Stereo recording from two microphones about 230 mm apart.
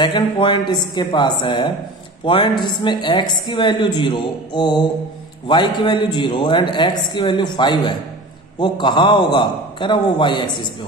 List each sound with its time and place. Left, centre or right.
0.0 s a woman's voice: centre